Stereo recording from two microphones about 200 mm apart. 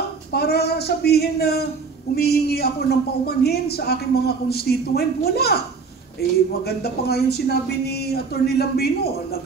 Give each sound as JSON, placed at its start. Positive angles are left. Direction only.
{"t": 0.3, "sound": "a man's voice", "side_deg": 50}
{"t": 6.7, "sound": "a man's voice", "side_deg": 50}